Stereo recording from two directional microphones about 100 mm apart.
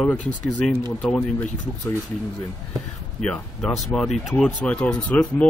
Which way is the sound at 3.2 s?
10° left (ahead or behind).